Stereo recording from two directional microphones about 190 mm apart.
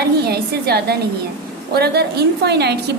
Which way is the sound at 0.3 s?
55° right (ahead or behind).